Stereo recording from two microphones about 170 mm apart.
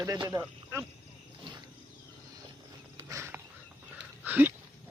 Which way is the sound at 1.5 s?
25° right (ahead or behind).